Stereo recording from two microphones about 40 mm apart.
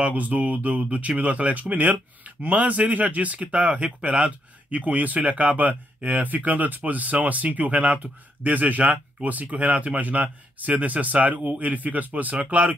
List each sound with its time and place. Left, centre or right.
0.0 s speech: right